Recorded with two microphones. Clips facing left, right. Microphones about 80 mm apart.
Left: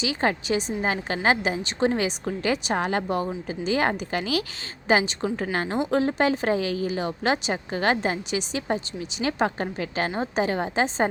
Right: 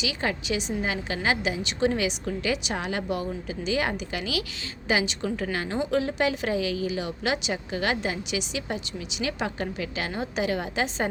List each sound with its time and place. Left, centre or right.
0.0 s a woman's voice: left